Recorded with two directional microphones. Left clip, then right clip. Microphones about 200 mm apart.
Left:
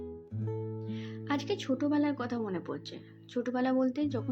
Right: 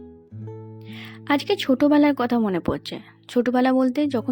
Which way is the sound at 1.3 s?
50° right (ahead or behind).